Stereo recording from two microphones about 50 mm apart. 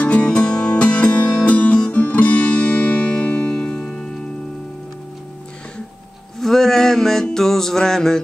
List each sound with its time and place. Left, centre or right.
0.0 s music: left
6.4 s a sound: centre
7.3 s music: centre